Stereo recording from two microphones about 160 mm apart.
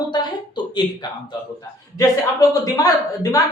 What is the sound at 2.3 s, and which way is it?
Speech, 20° left (ahead or behind).